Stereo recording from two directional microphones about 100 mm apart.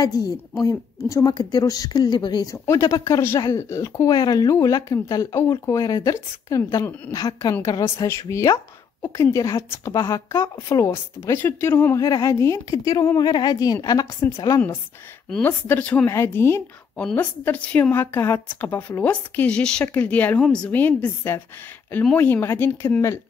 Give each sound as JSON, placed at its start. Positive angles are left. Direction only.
{"t": 0.0, "sound": "speech", "side_deg": 40}
{"t": 2.4, "sound": "speech", "side_deg": 30}
{"t": 10.7, "sound": "speech", "side_deg": 30}
{"t": 12.0, "sound": "speech", "side_deg": 35}
{"t": 15.2, "sound": "speech", "side_deg": 5}
{"t": 15.6, "sound": "a woman's voice", "side_deg": 20}